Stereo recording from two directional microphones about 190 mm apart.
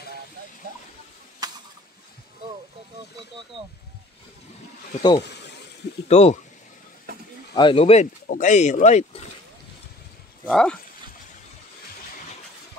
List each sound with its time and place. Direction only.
1.4 s a sound: 20° right (ahead or behind)
6.0 s speech: 35° left (ahead or behind)
7.5 s speech: 25° left (ahead or behind)
10.4 s speech: 5° left (ahead or behind)